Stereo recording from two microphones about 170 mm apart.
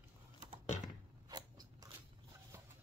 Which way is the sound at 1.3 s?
25° right (ahead or behind).